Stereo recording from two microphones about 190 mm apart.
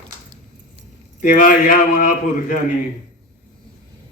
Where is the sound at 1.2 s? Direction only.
45° left (ahead or behind).